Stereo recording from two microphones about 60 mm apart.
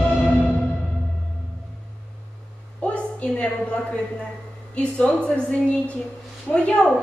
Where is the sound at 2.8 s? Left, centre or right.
Left.